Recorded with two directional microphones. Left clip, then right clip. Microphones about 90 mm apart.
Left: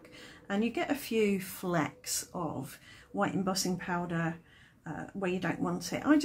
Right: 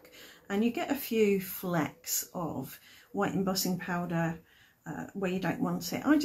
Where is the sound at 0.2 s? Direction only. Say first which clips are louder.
Right 2 dB; 35° left (ahead or behind).